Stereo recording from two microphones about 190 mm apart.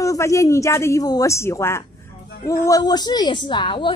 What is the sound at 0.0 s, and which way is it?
A woman's voice, 15° left (ahead or behind).